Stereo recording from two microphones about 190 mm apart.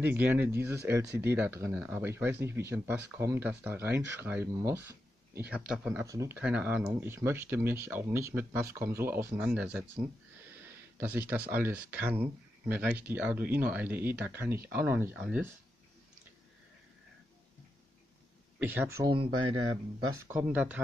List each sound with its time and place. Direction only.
0.0 s speech: 10° right (ahead or behind)
6.0 s speech: 15° right (ahead or behind)
6.3 s speech: 5° right (ahead or behind)
18.6 s speech: 10° right (ahead or behind)
19.0 s speech: 25° right (ahead or behind)
20.3 s speech: 5° right (ahead or behind)